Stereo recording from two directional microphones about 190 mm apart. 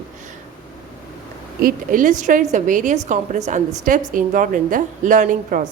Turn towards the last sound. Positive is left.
turn(degrees=-45)  # may be behind; listen again after turning